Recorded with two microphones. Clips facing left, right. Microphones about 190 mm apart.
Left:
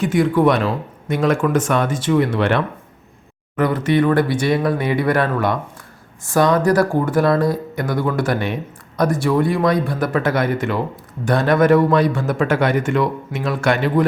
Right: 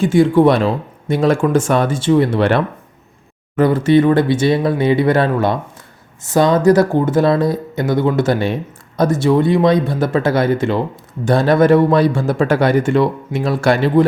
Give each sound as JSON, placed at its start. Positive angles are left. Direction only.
{"t": 0.0, "sound": "a man's voice", "side_deg": -30}